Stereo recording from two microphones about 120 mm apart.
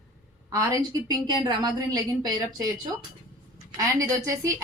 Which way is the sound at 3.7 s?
30° right (ahead or behind).